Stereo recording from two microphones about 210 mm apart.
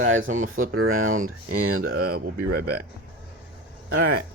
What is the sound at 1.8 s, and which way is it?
Speech, 50° right (ahead or behind).